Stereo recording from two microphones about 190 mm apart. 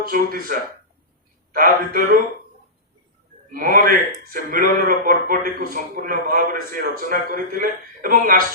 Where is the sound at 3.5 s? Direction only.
45° right (ahead or behind).